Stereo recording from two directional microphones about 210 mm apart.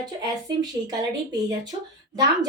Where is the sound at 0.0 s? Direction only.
20° right (ahead or behind).